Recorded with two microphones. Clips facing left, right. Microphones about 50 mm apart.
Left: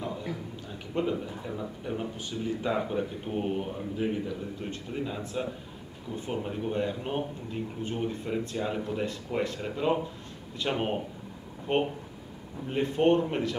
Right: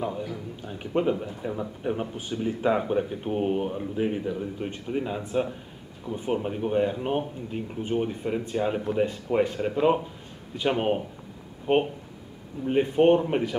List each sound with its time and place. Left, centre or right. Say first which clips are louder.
0.7 s speech: right 5 dB; right